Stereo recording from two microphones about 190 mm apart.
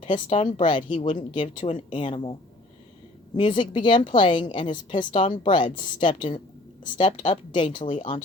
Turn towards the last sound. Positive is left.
turn(degrees=25)  # may be behind; listen again after turning